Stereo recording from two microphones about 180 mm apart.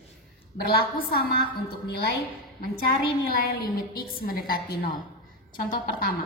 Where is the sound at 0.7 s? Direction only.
55° left (ahead or behind).